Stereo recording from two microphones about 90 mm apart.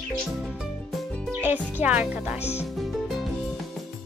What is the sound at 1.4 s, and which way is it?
Speech, 20° right (ahead or behind).